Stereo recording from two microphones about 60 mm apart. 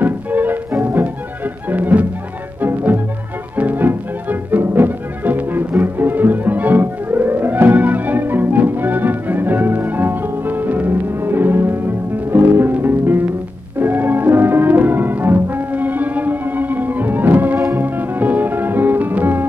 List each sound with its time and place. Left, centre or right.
0.0 s music: right
15.7 s music: right